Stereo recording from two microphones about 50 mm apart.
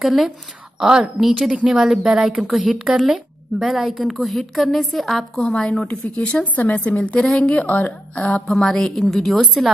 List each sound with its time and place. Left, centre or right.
0.0 s a woman's voice: centre
0.7 s a woman's voice: centre
1.2 s a woman's voice: centre
1.5 s speech: centre
1.8 s a woman's voice: centre
5.4 s a woman's voice: centre
5.9 s a woman's voice: left
7.2 s a woman's voice: centre
7.4 s a woman's voice: left
8.5 s a woman's voice: centre